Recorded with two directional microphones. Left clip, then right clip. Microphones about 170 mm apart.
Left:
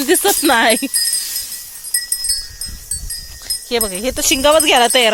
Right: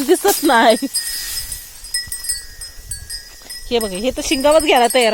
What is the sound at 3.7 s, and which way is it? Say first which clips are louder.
Speech: right 1 dB; 15° right (ahead or behind).